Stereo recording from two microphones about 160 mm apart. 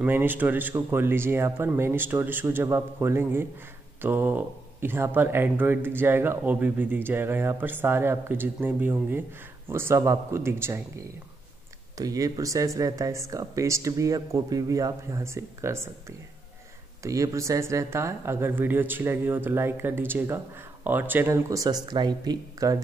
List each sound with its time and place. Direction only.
0.0 s speech: 10° right (ahead or behind)